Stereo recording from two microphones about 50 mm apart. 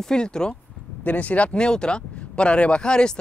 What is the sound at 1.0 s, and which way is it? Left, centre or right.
Speech, left.